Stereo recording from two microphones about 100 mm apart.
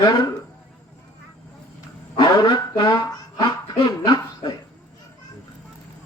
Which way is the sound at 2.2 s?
45° left (ahead or behind).